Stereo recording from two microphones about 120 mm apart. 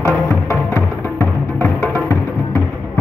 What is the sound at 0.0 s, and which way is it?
Music, 25° left (ahead or behind).